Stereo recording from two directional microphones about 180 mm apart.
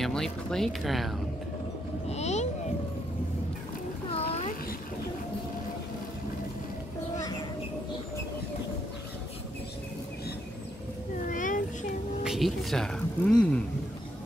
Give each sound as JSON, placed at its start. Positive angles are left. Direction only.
{"t": 0.0, "sound": "speech", "side_deg": 5}
{"t": 2.0, "sound": "vehicle", "side_deg": 35}
{"t": 4.1, "sound": "a sound", "side_deg": 35}
{"t": 11.2, "sound": "cat", "side_deg": 45}
{"t": 12.2, "sound": "speech", "side_deg": 0}